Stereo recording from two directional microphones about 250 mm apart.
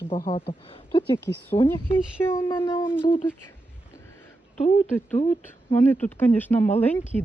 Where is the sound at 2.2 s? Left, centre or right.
Centre.